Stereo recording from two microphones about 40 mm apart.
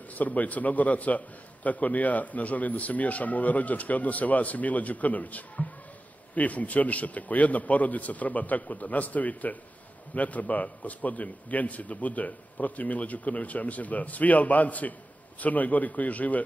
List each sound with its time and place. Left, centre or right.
0.1 s a man's voice: left